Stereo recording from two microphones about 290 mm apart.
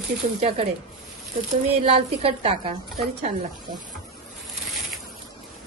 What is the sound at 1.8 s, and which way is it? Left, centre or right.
Speech, centre.